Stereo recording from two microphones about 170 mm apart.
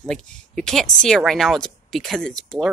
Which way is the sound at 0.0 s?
5° left (ahead or behind).